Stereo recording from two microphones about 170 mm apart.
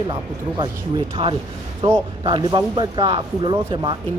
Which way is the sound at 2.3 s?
25° right (ahead or behind).